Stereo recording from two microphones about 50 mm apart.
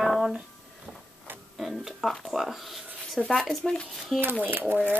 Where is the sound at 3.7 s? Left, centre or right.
Centre.